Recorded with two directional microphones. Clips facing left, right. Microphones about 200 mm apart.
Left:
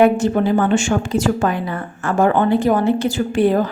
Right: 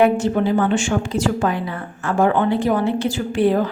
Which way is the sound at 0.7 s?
45° left (ahead or behind).